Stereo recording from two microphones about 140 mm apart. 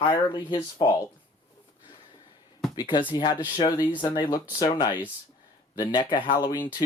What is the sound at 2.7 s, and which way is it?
Speech, 30° left (ahead or behind).